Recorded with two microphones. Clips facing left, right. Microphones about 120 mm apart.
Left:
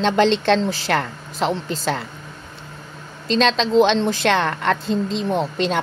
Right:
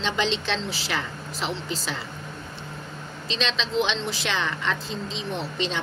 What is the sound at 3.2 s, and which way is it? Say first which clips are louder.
A woman's voice: left 11 dB; 45° left (ahead or behind).